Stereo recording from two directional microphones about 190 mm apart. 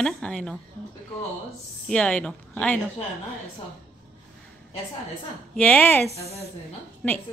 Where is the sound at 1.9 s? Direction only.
5° left (ahead or behind).